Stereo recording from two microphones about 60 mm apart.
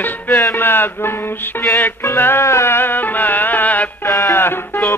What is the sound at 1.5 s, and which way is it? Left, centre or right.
Music, left.